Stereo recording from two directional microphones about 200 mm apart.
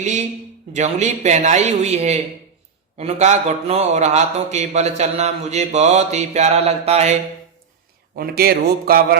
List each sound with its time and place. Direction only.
0.0 s a man's voice: 35° right (ahead or behind)
8.1 s speech: 50° right (ahead or behind)